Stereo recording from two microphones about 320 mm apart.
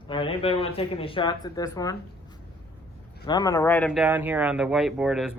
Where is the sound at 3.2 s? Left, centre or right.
Centre.